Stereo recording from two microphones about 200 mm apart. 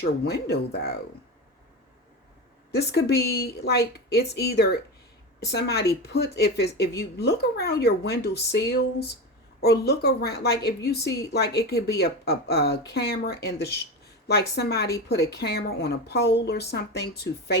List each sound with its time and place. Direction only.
0.0 s speech: 55° left (ahead or behind)
2.7 s speech: 55° left (ahead or behind)